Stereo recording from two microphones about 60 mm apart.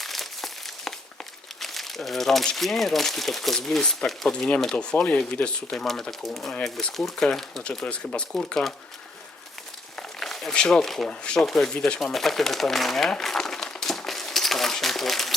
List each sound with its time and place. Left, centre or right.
0.0 s crumpling: centre
1.6 s speech: centre
4.3 s speech: centre
5.9 s speech: centre
10.2 s speech: centre
11.1 s speech: centre
13.1 s crumpling: centre